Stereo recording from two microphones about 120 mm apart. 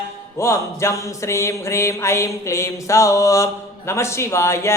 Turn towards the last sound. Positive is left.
turn(degrees=20)  # may be behind; listen again after turning